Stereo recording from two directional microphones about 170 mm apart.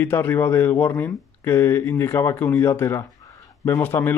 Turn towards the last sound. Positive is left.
turn(degrees=10)  # may be behind; listen again after turning